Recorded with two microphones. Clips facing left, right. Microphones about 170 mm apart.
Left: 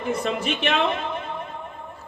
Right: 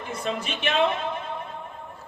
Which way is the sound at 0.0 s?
60° left (ahead or behind).